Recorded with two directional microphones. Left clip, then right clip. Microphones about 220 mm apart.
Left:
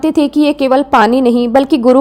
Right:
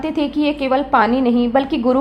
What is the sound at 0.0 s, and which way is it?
A woman's voice, 50° left (ahead or behind).